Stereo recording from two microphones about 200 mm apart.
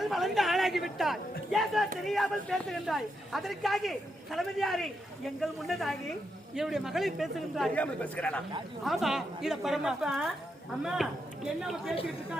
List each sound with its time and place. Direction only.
0.0 s speech: centre (ahead or behind)